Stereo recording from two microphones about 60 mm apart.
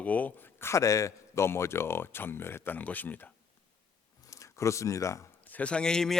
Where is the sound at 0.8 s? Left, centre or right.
Left.